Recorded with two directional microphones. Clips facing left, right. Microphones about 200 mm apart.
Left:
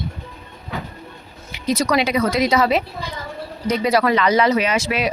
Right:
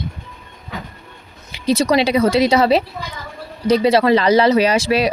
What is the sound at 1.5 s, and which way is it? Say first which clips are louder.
Speech: right 4 dB; 30° right (ahead or behind).